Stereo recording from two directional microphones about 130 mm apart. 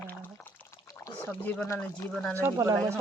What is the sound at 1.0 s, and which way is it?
Speech, 15° left (ahead or behind).